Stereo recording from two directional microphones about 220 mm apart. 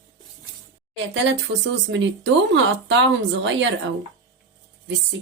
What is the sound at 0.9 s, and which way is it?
Speech, 55° right (ahead or behind).